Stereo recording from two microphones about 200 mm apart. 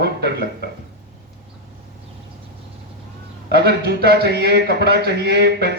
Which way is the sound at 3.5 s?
55° right (ahead or behind).